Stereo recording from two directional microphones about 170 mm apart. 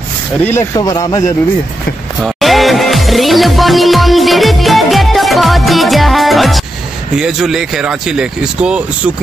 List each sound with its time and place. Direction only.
0.4 s speech: 15° left (ahead or behind)
0.7 s speech: 25° left (ahead or behind)
2.2 s music: centre (ahead or behind)
7.2 s speech: 5° right (ahead or behind)